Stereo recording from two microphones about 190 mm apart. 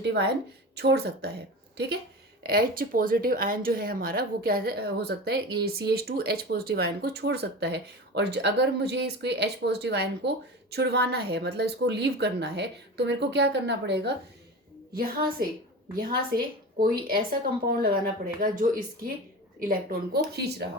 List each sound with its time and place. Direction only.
0.0 s speech: 65° right (ahead or behind)
14.9 s speech: 50° right (ahead or behind)